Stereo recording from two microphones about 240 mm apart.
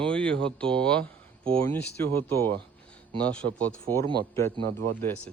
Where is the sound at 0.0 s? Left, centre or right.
Centre.